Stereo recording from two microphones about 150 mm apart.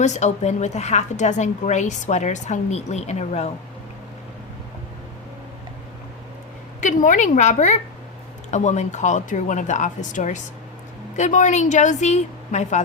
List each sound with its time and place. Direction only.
0.0 s a woman's voice: 50° left (ahead or behind)
6.8 s a woman's voice: 55° left (ahead or behind)